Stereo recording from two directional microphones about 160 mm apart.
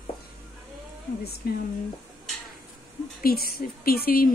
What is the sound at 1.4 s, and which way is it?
Speech, 75° left (ahead or behind).